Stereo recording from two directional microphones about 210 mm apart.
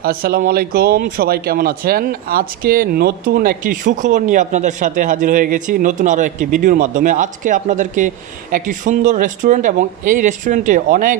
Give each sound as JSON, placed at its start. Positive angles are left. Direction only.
{"t": 0.0, "sound": "speech", "side_deg": -45}